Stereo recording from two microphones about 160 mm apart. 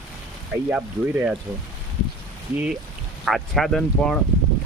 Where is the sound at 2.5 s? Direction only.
10° right (ahead or behind).